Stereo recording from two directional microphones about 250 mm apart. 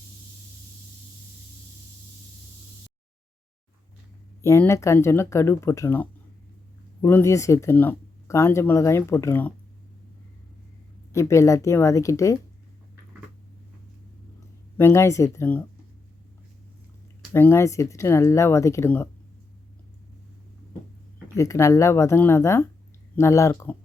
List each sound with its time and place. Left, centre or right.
4.4 s speech: centre
11.1 s speech: centre
14.8 s speech: centre
17.3 s speech: centre
21.3 s speech: centre